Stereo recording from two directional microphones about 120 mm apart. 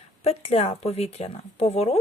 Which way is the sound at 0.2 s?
60° left (ahead or behind).